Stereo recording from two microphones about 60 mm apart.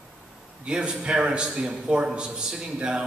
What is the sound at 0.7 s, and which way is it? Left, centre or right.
A man's voice, centre.